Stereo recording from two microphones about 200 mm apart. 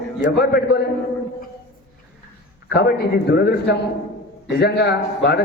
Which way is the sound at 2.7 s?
55° left (ahead or behind).